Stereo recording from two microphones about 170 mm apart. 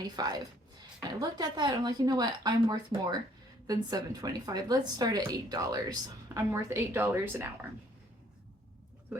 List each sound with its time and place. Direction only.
0.2 s a woman's voice: 25° right (ahead or behind)